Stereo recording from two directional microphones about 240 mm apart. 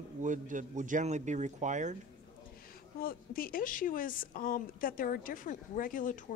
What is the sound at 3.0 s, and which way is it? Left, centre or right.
A woman's voice, left.